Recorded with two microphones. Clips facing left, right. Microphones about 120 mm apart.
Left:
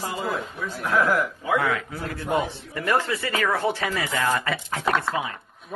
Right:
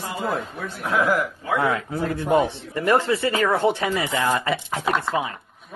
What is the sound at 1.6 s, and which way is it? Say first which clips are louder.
Speech: right 4 dB; 25° right (ahead or behind).